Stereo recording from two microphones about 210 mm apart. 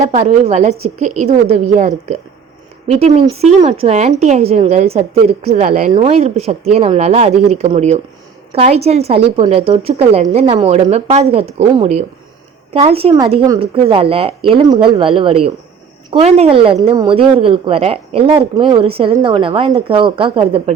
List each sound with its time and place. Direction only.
0.0 s a woman's voice: 35° right (ahead or behind)